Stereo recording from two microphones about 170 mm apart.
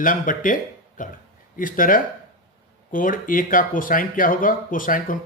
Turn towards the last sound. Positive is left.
turn(degrees=50)  # may be behind; listen again after turning